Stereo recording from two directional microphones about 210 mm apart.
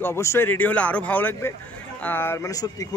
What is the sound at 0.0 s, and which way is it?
Speech, 10° left (ahead or behind).